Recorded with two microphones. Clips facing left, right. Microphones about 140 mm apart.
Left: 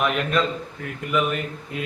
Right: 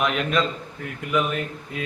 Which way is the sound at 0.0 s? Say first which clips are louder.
Left 1 dB; centre (ahead or behind).